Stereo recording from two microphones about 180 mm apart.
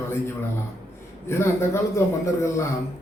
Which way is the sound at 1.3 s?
15° left (ahead or behind).